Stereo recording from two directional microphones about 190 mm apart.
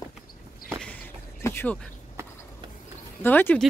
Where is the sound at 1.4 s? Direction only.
10° left (ahead or behind).